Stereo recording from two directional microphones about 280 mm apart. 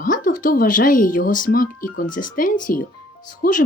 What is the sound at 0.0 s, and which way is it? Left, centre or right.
Speech, left.